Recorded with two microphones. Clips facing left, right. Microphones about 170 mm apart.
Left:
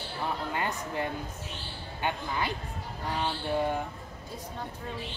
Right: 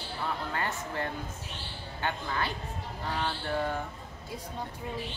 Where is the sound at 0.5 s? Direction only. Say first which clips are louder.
Left 2 dB; 15° left (ahead or behind).